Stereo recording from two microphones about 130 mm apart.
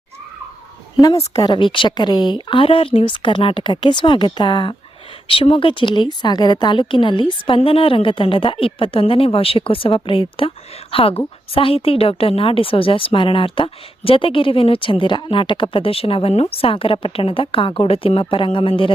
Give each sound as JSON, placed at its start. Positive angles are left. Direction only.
{"t": 1.4, "sound": "a woman's voice", "side_deg": 35}